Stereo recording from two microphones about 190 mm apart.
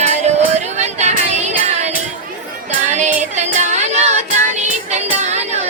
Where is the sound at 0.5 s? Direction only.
35° right (ahead or behind).